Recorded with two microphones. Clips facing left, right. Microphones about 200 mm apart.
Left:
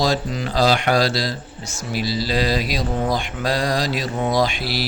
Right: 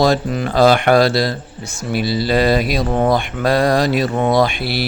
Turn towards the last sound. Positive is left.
turn(degrees=-60)  # may be behind; listen again after turning